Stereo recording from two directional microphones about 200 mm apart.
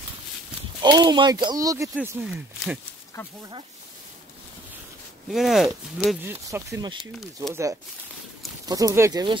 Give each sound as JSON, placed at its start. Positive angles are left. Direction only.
{"t": 0.8, "sound": "speech", "side_deg": -20}
{"t": 2.0, "sound": "speech", "side_deg": -5}
{"t": 5.3, "sound": "speech", "side_deg": 0}
{"t": 6.2, "sound": "speech", "side_deg": -10}
{"t": 8.6, "sound": "speech", "side_deg": -15}